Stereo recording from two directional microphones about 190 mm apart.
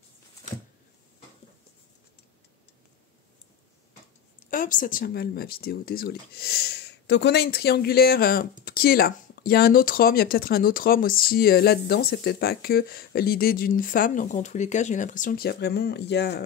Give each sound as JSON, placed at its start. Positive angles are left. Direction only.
{"t": 4.4, "sound": "speech", "side_deg": 45}